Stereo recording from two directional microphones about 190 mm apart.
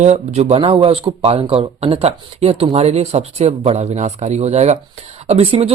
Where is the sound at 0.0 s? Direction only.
35° right (ahead or behind).